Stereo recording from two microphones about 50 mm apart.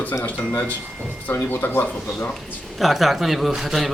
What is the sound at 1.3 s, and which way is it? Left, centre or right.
Speech, left.